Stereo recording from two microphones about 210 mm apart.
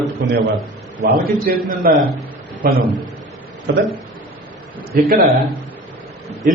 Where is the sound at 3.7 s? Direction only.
55° right (ahead or behind).